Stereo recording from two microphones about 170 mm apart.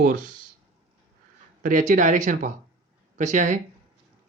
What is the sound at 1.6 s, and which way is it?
Speech, 50° right (ahead or behind).